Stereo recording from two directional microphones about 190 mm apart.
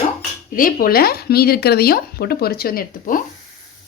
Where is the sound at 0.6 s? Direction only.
50° left (ahead or behind).